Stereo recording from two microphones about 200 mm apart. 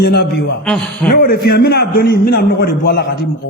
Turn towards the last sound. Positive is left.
turn(degrees=50)  # may be behind; listen again after turning